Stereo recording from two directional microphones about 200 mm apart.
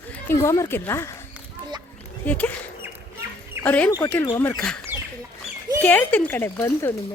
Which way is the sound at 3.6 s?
10° left (ahead or behind).